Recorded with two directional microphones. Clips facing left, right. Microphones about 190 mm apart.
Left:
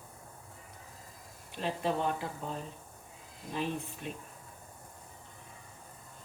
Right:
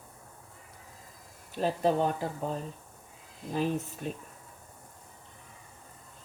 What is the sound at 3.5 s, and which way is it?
Speech, 40° right (ahead or behind).